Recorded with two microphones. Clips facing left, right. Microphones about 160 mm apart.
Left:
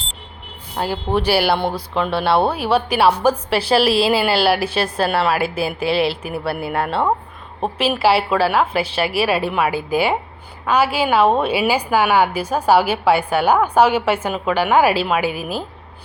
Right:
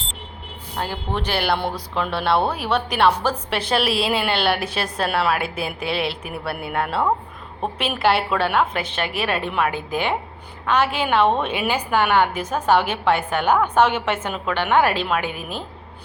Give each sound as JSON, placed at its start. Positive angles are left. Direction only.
{"t": 0.8, "sound": "a woman's voice", "side_deg": 10}